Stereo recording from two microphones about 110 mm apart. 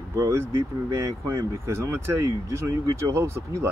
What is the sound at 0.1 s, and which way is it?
Speech, 25° right (ahead or behind).